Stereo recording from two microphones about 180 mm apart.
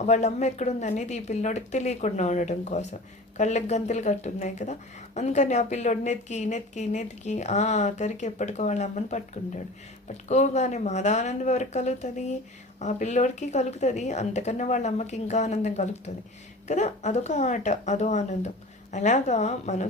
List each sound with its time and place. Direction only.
0.0 s speech: 40° left (ahead or behind)